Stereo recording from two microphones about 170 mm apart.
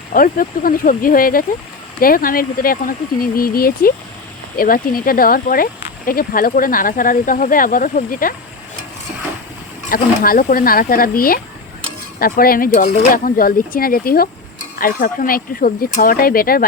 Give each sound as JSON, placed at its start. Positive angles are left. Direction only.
{"t": 0.1, "sound": "speech", "side_deg": 55}
{"t": 9.9, "sound": "speech", "side_deg": 55}